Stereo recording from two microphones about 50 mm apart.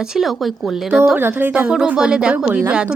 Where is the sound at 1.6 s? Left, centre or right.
Centre.